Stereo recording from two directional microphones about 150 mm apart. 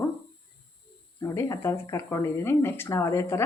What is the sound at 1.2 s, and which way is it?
A woman's voice, 20° left (ahead or behind).